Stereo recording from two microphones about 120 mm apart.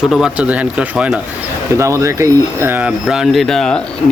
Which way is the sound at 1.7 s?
25° right (ahead or behind).